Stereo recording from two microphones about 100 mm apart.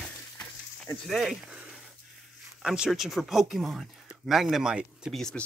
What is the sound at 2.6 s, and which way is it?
Speech, 5° right (ahead or behind).